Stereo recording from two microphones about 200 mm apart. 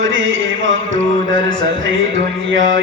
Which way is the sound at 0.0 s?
75° right (ahead or behind).